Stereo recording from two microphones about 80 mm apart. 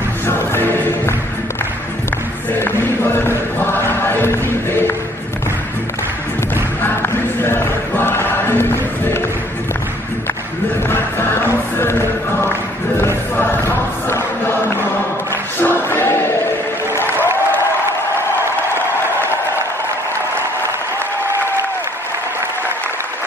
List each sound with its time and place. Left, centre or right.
0.3 s music: left
2.5 s music: left
6.5 s music: left
10.9 s music: left
15.6 s a sound: left